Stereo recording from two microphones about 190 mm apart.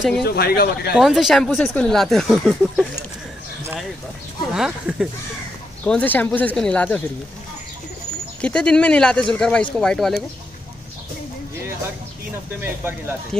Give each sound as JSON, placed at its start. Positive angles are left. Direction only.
{"t": 0.2, "sound": "speech", "side_deg": 55}
{"t": 0.9, "sound": "speech", "side_deg": 0}
{"t": 4.6, "sound": "speech", "side_deg": -5}
{"t": 5.9, "sound": "speech", "side_deg": 10}
{"t": 8.4, "sound": "speech", "side_deg": 5}
{"t": 12.5, "sound": "speech", "side_deg": -10}
{"t": 13.3, "sound": "speech", "side_deg": 5}